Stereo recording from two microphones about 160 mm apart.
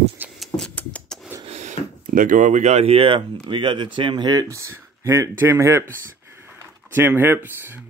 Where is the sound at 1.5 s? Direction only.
45° right (ahead or behind).